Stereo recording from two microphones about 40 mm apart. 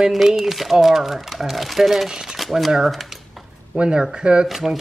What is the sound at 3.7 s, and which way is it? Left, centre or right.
Speech, right.